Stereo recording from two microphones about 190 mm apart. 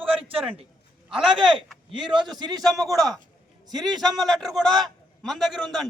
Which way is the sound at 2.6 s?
Centre (ahead or behind).